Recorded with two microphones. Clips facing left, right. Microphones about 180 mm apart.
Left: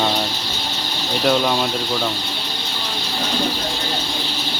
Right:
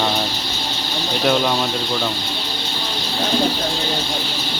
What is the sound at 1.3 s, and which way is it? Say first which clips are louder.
Speech: even; centre (ahead or behind).